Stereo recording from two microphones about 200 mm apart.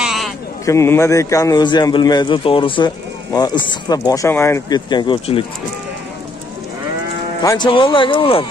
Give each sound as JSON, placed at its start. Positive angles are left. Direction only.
{"t": 0.0, "sound": "sheep", "side_deg": 0}
{"t": 0.7, "sound": "a man's voice", "side_deg": 15}
{"t": 7.4, "sound": "a man's voice", "side_deg": 20}